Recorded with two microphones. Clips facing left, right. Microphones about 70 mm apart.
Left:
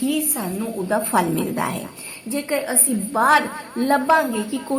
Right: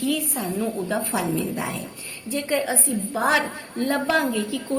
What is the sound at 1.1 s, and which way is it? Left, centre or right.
Speech, left.